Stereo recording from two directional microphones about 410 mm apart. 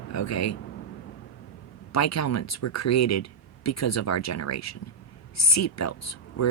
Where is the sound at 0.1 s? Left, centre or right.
Left.